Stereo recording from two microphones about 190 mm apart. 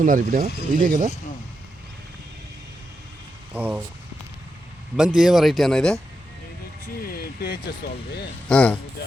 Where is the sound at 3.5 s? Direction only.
10° right (ahead or behind).